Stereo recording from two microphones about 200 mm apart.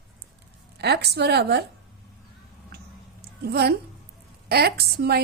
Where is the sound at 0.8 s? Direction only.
55° right (ahead or behind).